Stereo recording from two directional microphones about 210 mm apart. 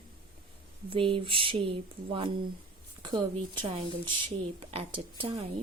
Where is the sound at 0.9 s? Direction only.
25° right (ahead or behind).